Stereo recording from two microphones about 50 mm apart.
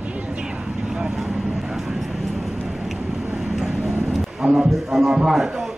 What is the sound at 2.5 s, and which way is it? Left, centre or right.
Vehicle, centre.